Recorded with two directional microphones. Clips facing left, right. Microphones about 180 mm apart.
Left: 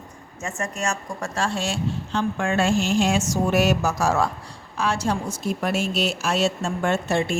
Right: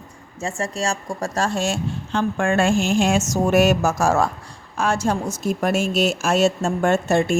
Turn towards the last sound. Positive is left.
turn(degrees=-45)  # may be behind; listen again after turning